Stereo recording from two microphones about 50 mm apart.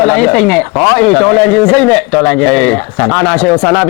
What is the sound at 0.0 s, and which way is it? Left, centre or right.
A man's voice, centre.